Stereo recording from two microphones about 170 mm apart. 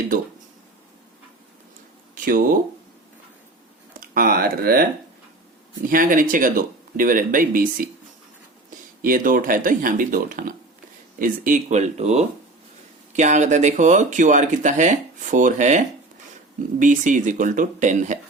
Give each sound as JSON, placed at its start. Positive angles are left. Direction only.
{"t": 2.1, "sound": "speech", "side_deg": -55}
{"t": 4.1, "sound": "speech", "side_deg": -60}
{"t": 5.9, "sound": "speech", "side_deg": -55}
{"t": 9.0, "sound": "speech", "side_deg": -55}
{"t": 16.8, "sound": "speech", "side_deg": -50}